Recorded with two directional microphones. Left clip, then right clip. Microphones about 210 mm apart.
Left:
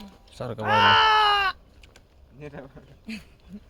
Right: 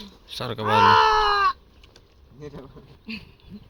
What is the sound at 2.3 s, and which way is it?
Speech, 5° left (ahead or behind).